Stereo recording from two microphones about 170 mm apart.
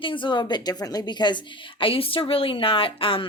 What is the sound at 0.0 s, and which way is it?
A woman's voice, 30° left (ahead or behind).